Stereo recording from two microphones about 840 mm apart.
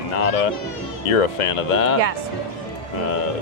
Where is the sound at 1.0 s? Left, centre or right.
Left.